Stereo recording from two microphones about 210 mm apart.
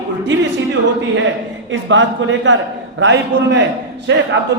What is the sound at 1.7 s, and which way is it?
Speech, 60° right (ahead or behind).